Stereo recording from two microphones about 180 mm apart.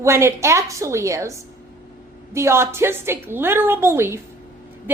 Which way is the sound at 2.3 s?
15° right (ahead or behind).